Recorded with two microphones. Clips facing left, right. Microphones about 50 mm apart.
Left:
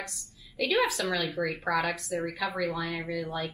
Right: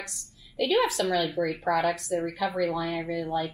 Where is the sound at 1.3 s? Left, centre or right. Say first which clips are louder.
Right 3 dB; left.